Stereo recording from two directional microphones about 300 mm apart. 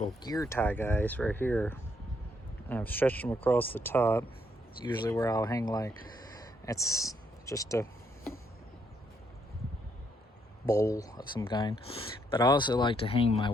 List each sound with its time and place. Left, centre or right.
0.2 s speech: centre
10.7 s speech: centre